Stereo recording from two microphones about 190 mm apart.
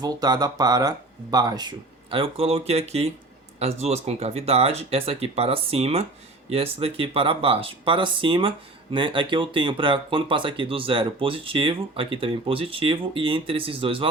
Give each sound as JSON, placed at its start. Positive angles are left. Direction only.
{"t": 0.0, "sound": "speech", "side_deg": -20}